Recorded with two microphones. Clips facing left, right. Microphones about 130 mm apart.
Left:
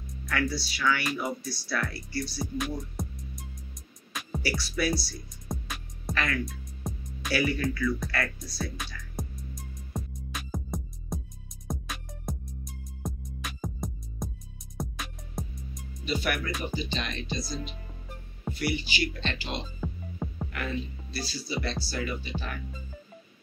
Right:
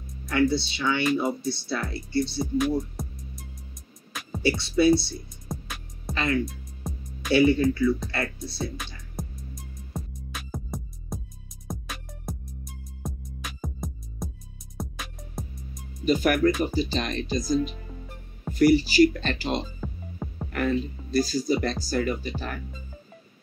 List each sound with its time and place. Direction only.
0.2 s speech: 25° right (ahead or behind)
3.0 s music: centre (ahead or behind)
4.4 s speech: 25° right (ahead or behind)
5.5 s music: centre (ahead or behind)
6.1 s speech: 25° right (ahead or behind)
6.4 s music: centre (ahead or behind)
7.3 s speech: 25° right (ahead or behind)
9.2 s music: centre (ahead or behind)
16.1 s speech: 45° right (ahead or behind)
19.8 s music: centre (ahead or behind)
20.5 s speech: 45° right (ahead or behind)